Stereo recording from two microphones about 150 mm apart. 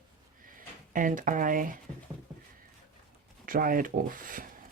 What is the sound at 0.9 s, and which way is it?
Speech, 60° right (ahead or behind).